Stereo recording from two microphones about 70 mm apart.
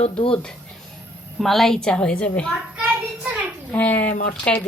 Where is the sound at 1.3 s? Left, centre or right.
Centre.